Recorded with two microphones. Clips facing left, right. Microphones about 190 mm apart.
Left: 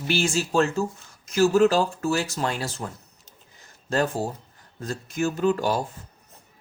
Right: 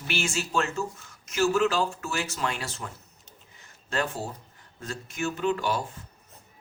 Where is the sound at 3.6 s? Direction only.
40° left (ahead or behind).